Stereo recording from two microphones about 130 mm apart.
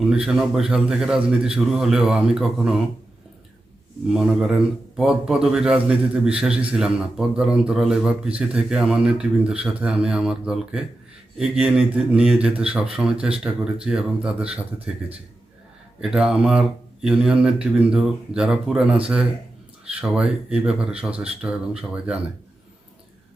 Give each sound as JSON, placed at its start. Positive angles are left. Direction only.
{"t": 0.0, "sound": "a man's voice", "side_deg": -5}
{"t": 4.1, "sound": "a man's voice", "side_deg": -5}
{"t": 16.0, "sound": "a man's voice", "side_deg": -5}